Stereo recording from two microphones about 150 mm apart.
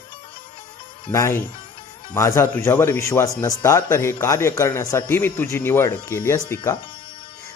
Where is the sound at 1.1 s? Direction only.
20° left (ahead or behind).